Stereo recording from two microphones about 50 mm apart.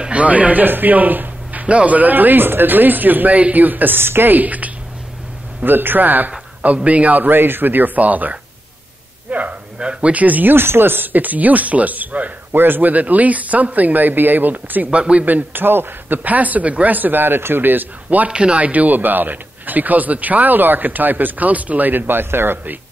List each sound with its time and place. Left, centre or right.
0.1 s speech: right
4.3 s speech: right
5.6 s speech: right
9.8 s speech: right
10.5 s speech: right
12.5 s speech: right
15.0 s speech: right
15.2 s speech: right
16.3 s speech: right
18.3 s speech: right